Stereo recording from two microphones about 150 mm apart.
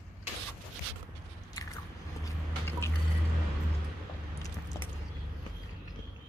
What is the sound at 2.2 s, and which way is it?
Vehicle, 15° left (ahead or behind).